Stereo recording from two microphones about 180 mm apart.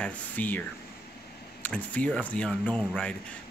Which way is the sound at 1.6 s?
5° left (ahead or behind).